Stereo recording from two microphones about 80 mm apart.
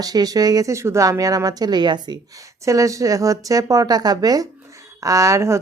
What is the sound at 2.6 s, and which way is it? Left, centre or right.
Speech, right.